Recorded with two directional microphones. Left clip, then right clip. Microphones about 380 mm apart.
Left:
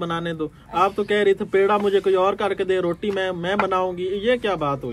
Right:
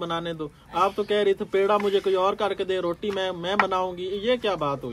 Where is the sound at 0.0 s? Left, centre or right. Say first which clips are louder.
Left 3 dB; centre.